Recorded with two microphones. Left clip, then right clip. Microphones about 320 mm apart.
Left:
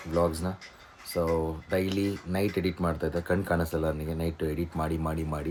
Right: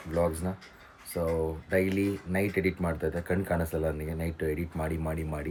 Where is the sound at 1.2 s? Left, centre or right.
Centre.